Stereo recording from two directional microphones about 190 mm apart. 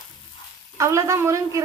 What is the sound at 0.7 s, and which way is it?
Speech, 15° right (ahead or behind).